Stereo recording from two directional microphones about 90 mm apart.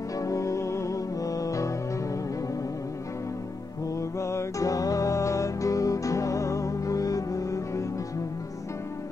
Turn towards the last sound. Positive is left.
turn(degrees=35)  # may be behind; listen again after turning